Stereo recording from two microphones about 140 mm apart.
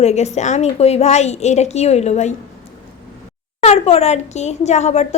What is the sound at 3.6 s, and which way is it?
A woman's voice, 50° left (ahead or behind).